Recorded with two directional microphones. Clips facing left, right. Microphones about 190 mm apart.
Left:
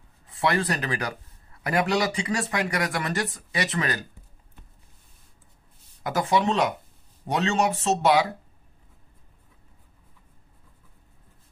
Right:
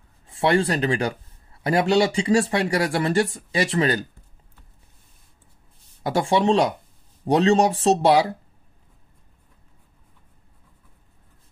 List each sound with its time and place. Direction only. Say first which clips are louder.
0.3 s speech: right 5 dB; 30° right (ahead or behind)
6.0 s speech: right 4 dB; 30° right (ahead or behind)